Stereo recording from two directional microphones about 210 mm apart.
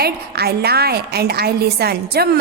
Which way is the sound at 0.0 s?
50° right (ahead or behind).